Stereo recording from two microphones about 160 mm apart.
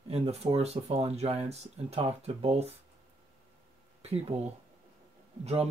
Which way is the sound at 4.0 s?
40° right (ahead or behind).